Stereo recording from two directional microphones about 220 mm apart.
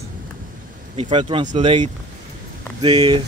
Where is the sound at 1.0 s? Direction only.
25° right (ahead or behind).